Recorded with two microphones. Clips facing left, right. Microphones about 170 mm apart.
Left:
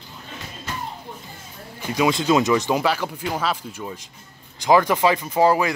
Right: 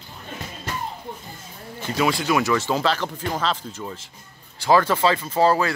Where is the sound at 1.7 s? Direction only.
15° left (ahead or behind).